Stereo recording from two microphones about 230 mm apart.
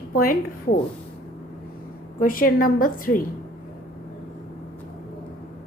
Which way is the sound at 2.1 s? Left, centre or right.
Left.